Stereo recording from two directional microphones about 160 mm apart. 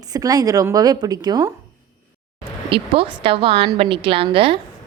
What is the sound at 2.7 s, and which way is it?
Speech, 35° right (ahead or behind).